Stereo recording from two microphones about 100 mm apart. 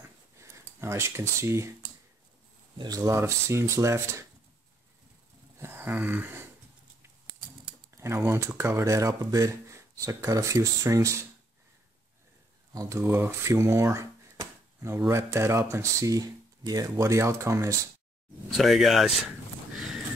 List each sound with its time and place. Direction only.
0.4 s speech: 30° right (ahead or behind)
2.8 s speech: 35° right (ahead or behind)
5.6 s speech: 25° right (ahead or behind)
8.0 s speech: 25° right (ahead or behind)
12.7 s speech: 30° right (ahead or behind)
18.6 s speech: centre (ahead or behind)